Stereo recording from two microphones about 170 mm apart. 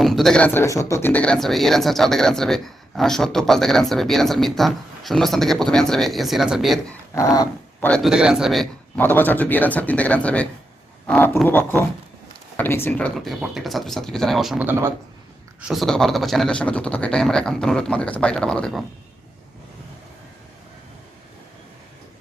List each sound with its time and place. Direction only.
0.0 s speech: centre (ahead or behind)
7.1 s speech: 20° left (ahead or behind)
7.9 s speech: centre (ahead or behind)
11.0 s a sound: 10° left (ahead or behind)
11.4 s speech: 10° left (ahead or behind)
13.1 s speech: centre (ahead or behind)
15.6 s speech: centre (ahead or behind)